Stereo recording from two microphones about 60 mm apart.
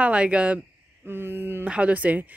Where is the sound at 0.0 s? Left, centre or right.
Centre.